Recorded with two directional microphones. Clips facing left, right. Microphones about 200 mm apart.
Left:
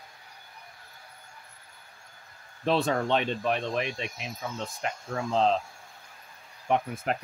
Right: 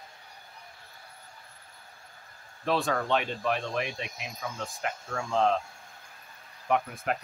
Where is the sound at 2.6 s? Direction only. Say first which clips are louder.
Left 2 dB; 20° left (ahead or behind).